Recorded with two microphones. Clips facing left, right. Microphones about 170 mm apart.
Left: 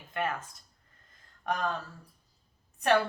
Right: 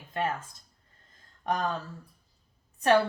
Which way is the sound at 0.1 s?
30° right (ahead or behind).